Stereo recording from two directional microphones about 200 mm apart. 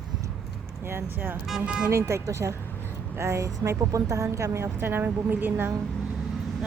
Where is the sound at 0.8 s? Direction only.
10° right (ahead or behind).